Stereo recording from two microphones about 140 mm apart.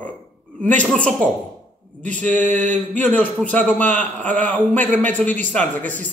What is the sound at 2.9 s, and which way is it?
A man's voice, 10° left (ahead or behind).